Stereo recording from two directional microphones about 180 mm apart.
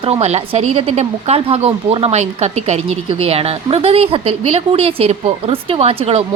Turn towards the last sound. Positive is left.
turn(degrees=-30)  # may be behind; listen again after turning